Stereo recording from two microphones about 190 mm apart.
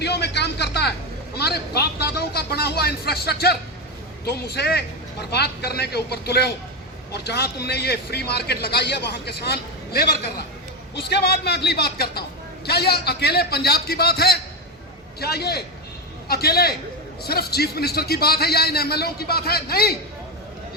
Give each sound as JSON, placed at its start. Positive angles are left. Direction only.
{"t": 0.0, "sound": "a man's voice", "side_deg": 60}